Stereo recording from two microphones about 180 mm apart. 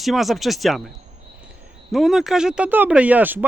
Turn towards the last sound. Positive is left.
turn(degrees=-10)  # may be behind; listen again after turning